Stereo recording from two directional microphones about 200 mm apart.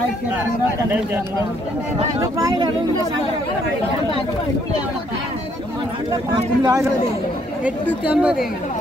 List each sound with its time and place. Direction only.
2.3 s speech: 20° right (ahead or behind)
6.6 s speech: 20° right (ahead or behind)
8.1 s a woman's voice: 5° right (ahead or behind)